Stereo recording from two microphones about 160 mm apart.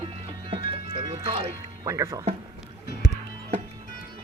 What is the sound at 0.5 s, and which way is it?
Music, 35° right (ahead or behind).